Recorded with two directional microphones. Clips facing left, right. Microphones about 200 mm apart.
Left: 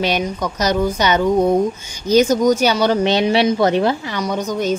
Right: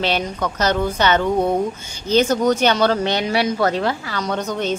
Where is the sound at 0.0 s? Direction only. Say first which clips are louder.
Left 2 dB; 15° left (ahead or behind).